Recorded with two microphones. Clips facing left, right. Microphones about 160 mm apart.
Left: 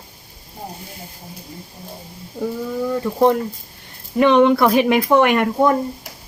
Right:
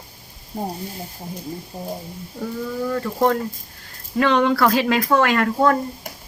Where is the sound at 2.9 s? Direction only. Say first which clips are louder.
Left 4 dB; 15° left (ahead or behind).